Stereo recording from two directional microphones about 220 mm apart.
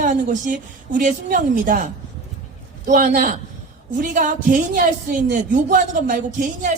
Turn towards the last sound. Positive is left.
turn(degrees=-40)  # may be behind; listen again after turning